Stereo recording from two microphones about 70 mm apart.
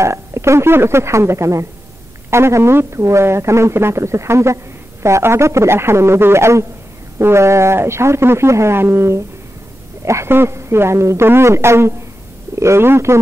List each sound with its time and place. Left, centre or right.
0.0 s speech: right